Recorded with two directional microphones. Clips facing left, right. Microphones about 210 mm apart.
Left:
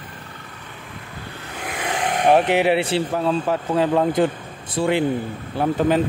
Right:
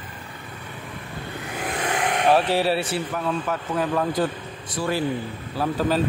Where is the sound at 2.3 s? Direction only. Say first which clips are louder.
Left 4 dB; 20° left (ahead or behind).